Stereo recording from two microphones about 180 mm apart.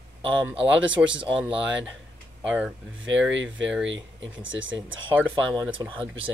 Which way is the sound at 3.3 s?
90° right.